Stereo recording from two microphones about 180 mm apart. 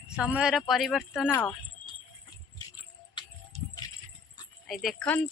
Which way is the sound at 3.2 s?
25° left (ahead or behind).